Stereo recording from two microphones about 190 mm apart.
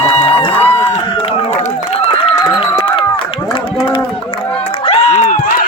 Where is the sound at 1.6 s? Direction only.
35° left (ahead or behind).